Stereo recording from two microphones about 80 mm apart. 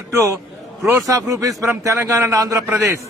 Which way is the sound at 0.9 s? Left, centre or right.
Right.